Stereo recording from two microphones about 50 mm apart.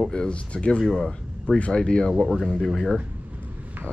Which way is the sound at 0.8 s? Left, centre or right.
Centre.